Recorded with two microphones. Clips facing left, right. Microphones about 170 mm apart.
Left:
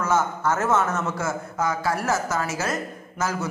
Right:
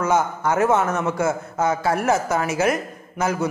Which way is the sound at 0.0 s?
15° right (ahead or behind).